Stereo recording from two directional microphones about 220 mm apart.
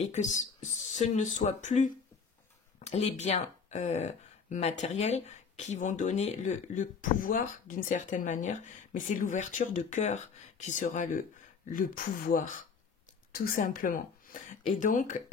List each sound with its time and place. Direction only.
0.0 s speech: 30° left (ahead or behind)